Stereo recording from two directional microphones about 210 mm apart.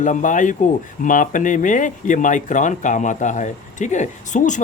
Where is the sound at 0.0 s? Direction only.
35° left (ahead or behind).